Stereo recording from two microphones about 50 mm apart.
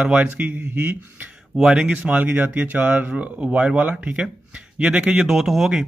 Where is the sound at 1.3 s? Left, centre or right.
Centre.